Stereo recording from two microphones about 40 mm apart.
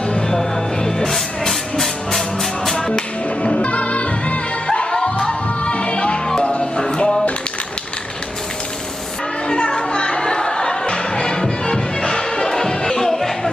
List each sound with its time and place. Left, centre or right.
0.3 s music: centre
2.7 s music: centre
3.5 s music: left
9.5 s music: left